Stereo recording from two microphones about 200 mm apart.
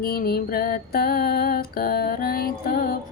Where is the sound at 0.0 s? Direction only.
50° left (ahead or behind).